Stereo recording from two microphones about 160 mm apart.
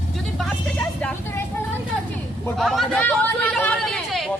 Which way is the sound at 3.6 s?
5° left (ahead or behind).